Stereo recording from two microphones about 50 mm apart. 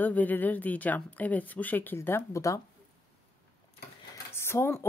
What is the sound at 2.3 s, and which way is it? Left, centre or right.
Speech, left.